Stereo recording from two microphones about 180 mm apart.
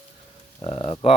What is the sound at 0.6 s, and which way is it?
Speech, 30° left (ahead or behind).